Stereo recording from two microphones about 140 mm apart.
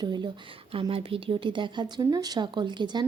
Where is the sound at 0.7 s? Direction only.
40° right (ahead or behind).